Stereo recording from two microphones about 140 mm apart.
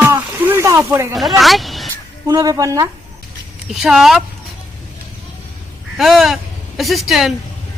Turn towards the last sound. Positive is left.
turn(degrees=0)  # may be behind; listen again after turning